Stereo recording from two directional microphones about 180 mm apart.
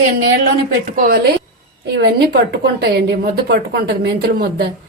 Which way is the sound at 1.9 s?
65° right (ahead or behind).